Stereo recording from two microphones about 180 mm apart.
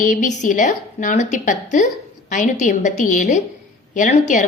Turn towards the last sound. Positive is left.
turn(degrees=40)  # may be behind; listen again after turning